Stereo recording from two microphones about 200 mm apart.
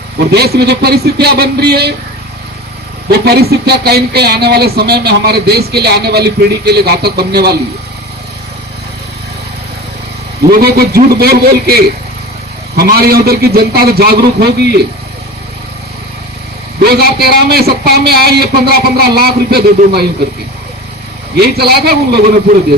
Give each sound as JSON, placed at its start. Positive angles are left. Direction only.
{"t": 0.3, "sound": "speech", "side_deg": -55}
{"t": 3.1, "sound": "speech", "side_deg": -50}
{"t": 10.4, "sound": "speech", "side_deg": -50}
{"t": 16.8, "sound": "speech", "side_deg": -50}
{"t": 21.4, "sound": "speech", "side_deg": -50}